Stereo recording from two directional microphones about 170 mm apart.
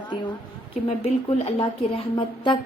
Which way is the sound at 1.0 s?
35° left (ahead or behind).